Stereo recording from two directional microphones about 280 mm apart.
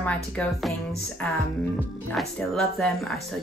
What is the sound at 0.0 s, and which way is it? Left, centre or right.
Speech, centre.